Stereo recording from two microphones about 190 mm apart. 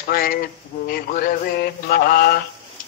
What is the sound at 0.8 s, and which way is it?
Mantra, 50° left (ahead or behind).